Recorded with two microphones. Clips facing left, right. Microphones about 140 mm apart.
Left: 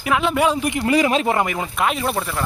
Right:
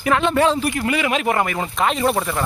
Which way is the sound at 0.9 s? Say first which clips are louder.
Left 5 dB; 35° left (ahead or behind).